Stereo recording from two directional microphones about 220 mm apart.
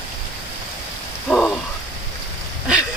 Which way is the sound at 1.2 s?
5° left (ahead or behind).